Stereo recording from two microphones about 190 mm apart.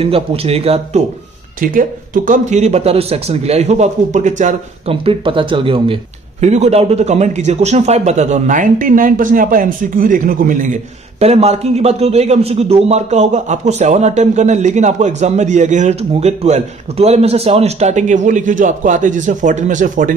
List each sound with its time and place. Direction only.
0.0 s speech: 30° right (ahead or behind)
1.6 s speech: 45° right (ahead or behind)